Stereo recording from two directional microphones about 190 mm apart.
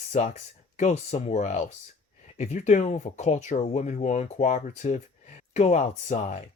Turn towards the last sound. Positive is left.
turn(degrees=40)  # may be behind; listen again after turning